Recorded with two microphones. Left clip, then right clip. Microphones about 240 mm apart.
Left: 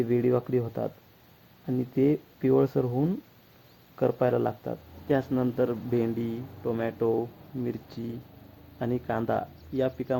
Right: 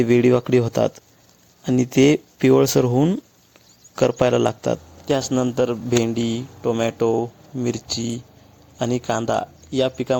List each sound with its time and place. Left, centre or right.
0.0 s speech: right
5.0 s speech: right